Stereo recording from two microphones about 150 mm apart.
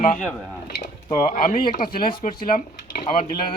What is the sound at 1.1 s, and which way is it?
Speech, 65° left (ahead or behind).